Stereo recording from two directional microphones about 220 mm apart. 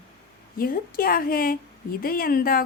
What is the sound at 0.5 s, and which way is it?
Speech, 40° left (ahead or behind).